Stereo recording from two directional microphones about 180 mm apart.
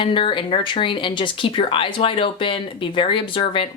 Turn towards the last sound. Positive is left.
turn(degrees=30)  # may be behind; listen again after turning